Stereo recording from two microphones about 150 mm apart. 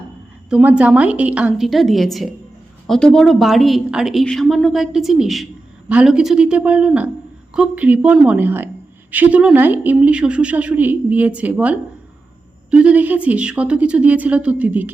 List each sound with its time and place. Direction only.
0.5 s a woman's voice: 10° right (ahead or behind)